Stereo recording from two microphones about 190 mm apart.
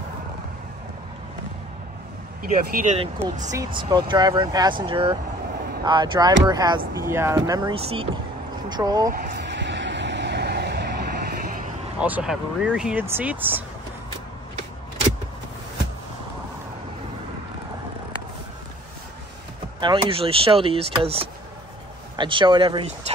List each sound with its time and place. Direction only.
2.4 s speech: 45° right (ahead or behind)
3.5 s speech: 25° right (ahead or behind)
7.8 s speech: 30° right (ahead or behind)
9.1 s vehicle: 55° right (ahead or behind)
12.0 s speech: 5° right (ahead or behind)
19.8 s speech: 25° right (ahead or behind)